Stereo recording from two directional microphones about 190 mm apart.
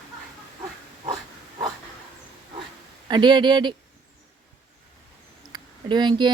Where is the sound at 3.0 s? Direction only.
25° right (ahead or behind).